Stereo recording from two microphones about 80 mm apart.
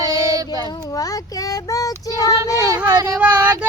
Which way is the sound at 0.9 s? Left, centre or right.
Left.